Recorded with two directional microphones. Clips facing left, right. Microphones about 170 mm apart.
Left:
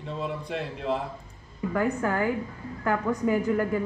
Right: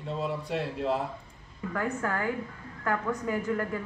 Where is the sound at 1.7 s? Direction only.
15° left (ahead or behind).